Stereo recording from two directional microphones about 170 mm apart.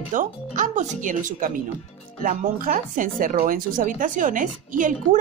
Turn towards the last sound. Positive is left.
turn(degrees=-50)  # may be behind; listen again after turning